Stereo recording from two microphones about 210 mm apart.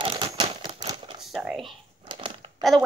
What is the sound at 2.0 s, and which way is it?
Crumpling, 25° right (ahead or behind).